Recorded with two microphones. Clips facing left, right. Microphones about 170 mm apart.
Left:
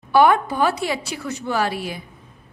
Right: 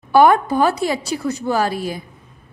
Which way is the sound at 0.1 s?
45° right (ahead or behind).